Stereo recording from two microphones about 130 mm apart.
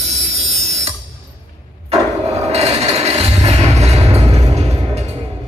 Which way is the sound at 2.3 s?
55° right (ahead or behind).